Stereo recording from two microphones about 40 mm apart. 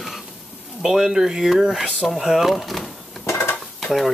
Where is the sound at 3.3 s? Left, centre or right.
Left.